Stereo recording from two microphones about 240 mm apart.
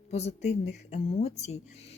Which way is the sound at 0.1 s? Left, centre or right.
Left.